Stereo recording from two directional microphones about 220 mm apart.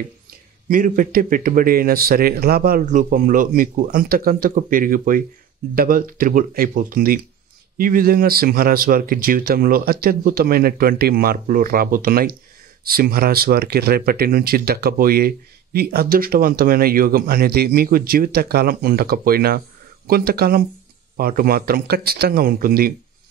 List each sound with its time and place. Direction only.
0.7 s speech: 40° right (ahead or behind)